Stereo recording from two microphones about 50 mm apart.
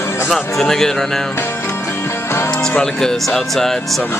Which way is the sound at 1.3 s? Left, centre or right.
Left.